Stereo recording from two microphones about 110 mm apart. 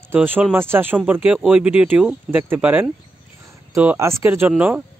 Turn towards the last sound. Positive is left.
turn(degrees=-15)  # may be behind; listen again after turning